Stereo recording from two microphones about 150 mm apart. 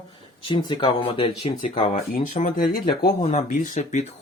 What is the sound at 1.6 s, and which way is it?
Speech, 60° left (ahead or behind).